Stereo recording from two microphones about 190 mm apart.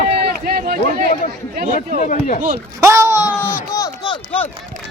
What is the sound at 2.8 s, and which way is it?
Speech, 15° right (ahead or behind).